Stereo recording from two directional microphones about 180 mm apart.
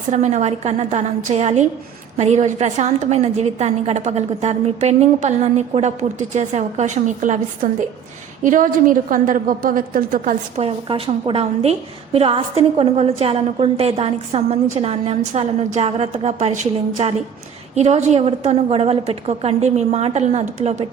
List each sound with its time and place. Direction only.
0.1 s a woman's voice: 40° right (ahead or behind)
10.6 s a woman's voice: 35° right (ahead or behind)